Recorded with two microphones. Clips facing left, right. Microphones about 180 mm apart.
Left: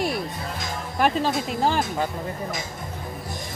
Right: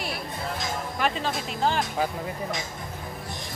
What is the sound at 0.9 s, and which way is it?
Speech, 45° left (ahead or behind).